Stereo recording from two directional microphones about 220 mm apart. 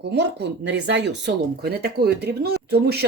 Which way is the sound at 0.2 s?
50° right (ahead or behind).